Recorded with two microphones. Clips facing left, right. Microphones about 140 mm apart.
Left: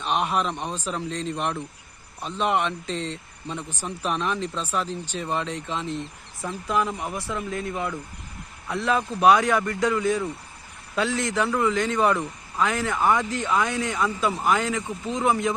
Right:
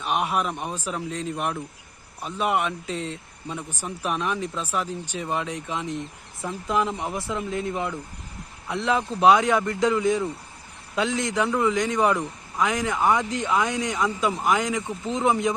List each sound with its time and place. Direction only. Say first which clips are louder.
0.0 s a man's voice: even; 10° right (ahead or behind)